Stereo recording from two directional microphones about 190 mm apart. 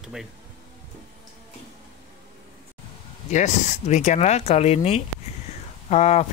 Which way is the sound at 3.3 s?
40° left (ahead or behind).